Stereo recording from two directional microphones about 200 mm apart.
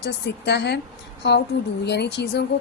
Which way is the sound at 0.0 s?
60° left (ahead or behind).